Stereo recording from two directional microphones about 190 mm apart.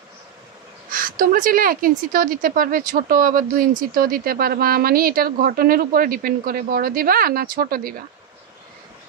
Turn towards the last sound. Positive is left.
turn(degrees=-50)  # may be behind; listen again after turning